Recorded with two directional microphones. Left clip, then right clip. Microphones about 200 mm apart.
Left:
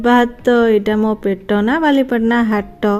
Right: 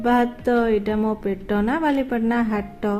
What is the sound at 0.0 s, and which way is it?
Speech, 40° left (ahead or behind).